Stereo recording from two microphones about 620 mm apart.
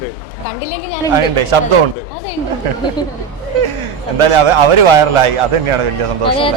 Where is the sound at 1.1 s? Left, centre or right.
Right.